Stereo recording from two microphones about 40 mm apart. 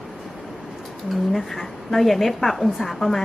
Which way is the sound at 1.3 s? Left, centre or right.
Centre.